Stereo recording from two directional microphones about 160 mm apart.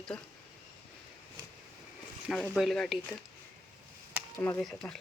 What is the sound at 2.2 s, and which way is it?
Speech, 5° right (ahead or behind).